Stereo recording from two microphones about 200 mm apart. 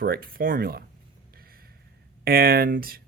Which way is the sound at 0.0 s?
50° right (ahead or behind).